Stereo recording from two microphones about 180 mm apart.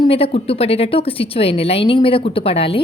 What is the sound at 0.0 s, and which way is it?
A woman's voice, 30° left (ahead or behind).